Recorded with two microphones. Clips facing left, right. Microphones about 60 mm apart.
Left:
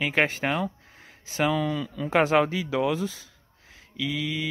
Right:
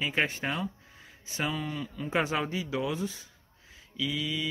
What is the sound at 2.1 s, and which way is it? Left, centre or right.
Speech, left.